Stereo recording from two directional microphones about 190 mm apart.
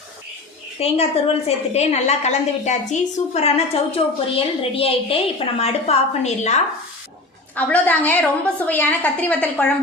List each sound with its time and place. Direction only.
0.8 s a woman's voice: 30° left (ahead or behind)
7.5 s a woman's voice: 10° left (ahead or behind)